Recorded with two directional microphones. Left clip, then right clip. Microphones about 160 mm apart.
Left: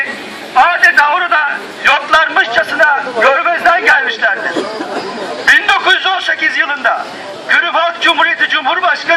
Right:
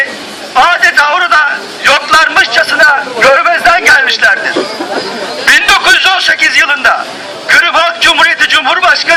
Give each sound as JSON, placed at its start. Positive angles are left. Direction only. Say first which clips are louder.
{"t": 0.5, "sound": "a man's voice", "louder": "right 2 dB", "side_deg": -20}
{"t": 5.5, "sound": "a sound", "louder": "right 3 dB", "side_deg": -15}
{"t": 7.4, "sound": "a man's voice", "louder": "right 5 dB", "side_deg": -15}